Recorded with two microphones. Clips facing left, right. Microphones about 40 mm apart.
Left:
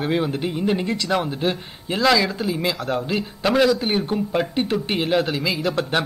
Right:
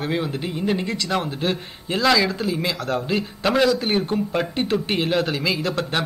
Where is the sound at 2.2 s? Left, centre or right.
Centre.